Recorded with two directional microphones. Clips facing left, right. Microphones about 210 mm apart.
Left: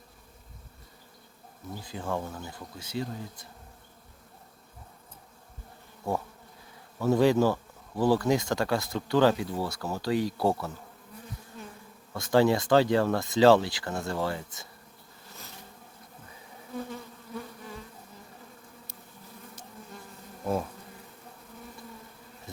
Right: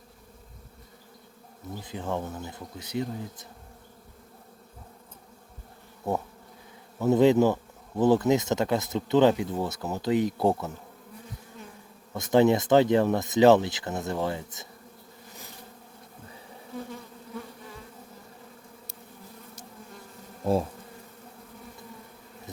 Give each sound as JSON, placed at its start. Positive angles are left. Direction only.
{"t": 1.8, "sound": "speech", "side_deg": -20}
{"t": 7.0, "sound": "speech", "side_deg": -20}
{"t": 12.1, "sound": "speech", "side_deg": -20}